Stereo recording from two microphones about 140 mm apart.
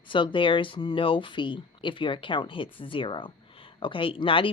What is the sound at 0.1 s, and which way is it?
Speech, 35° left (ahead or behind).